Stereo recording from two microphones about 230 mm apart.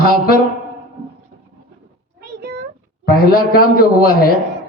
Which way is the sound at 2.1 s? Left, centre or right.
Right.